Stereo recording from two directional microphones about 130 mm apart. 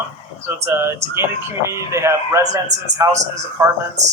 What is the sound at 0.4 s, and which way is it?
A man's voice, 20° right (ahead or behind).